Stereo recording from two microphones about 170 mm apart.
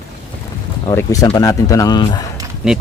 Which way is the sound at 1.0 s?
20° left (ahead or behind).